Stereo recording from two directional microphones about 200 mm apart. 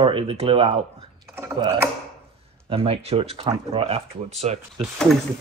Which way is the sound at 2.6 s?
30° right (ahead or behind).